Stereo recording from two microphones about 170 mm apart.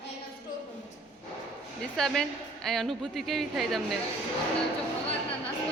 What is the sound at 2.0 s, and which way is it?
A woman's voice, 5° left (ahead or behind).